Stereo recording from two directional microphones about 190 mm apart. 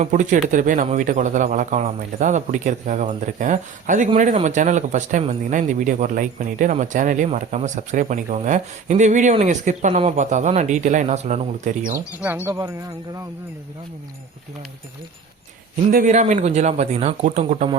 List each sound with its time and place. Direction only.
0.0 s a man's voice: 40° right (ahead or behind)
12.2 s speech: 10° right (ahead or behind)
15.9 s a man's voice: 45° right (ahead or behind)